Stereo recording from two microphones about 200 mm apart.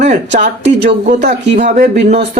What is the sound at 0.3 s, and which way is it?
Speech, 55° right (ahead or behind).